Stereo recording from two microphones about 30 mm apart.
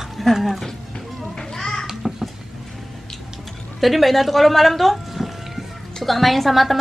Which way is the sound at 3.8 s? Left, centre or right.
Centre.